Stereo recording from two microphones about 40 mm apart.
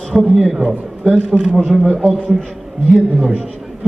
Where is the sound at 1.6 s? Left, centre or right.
Centre.